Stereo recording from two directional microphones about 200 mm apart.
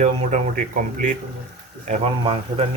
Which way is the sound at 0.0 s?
40° right (ahead or behind).